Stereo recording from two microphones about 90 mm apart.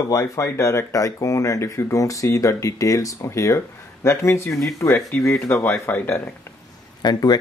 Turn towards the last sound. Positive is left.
turn(degrees=50)  # may be behind; listen again after turning